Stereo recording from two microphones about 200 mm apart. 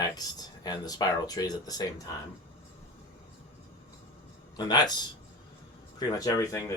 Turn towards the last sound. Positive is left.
turn(degrees=15)  # may be behind; listen again after turning